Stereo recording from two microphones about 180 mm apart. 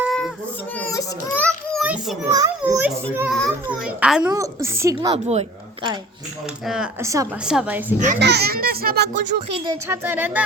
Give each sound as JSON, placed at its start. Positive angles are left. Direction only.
{"t": 0.0, "sound": "baby cry", "side_deg": 0}
{"t": 0.8, "sound": "children playing", "side_deg": 15}
{"t": 1.8, "sound": "a child's voice", "side_deg": -5}
{"t": 2.3, "sound": "a child's voice", "side_deg": -20}
{"t": 3.2, "sound": "speech", "side_deg": 5}
{"t": 3.7, "sound": "a child's voice", "side_deg": -5}
{"t": 5.1, "sound": "a woman's voice", "side_deg": -35}
{"t": 6.7, "sound": "speech", "side_deg": -5}
{"t": 7.0, "sound": "a child's voice", "side_deg": -15}
{"t": 7.4, "sound": "a child's voice", "side_deg": -5}
{"t": 7.9, "sound": "a child's voice", "side_deg": -45}
{"t": 8.2, "sound": "a child's voice", "side_deg": -65}
{"t": 9.6, "sound": "a child's voice", "side_deg": -15}